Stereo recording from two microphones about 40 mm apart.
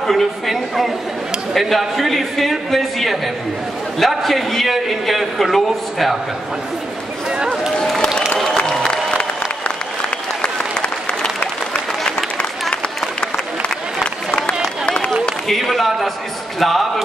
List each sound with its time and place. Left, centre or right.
0.0 s a man's voice: centre
7.2 s run: centre
7.8 s applause: centre
15.4 s a man's voice: centre